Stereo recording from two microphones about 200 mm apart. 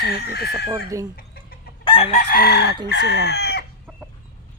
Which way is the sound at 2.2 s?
50° left (ahead or behind).